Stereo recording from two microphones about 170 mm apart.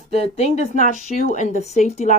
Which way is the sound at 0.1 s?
40° left (ahead or behind).